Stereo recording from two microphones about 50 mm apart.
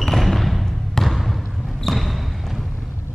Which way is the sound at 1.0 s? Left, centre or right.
Centre.